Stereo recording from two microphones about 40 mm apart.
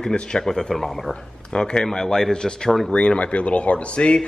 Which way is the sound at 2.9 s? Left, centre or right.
Left.